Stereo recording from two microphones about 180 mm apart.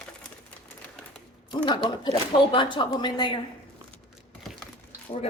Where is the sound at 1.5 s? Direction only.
25° left (ahead or behind).